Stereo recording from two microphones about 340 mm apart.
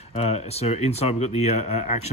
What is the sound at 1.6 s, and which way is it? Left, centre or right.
Speech, left.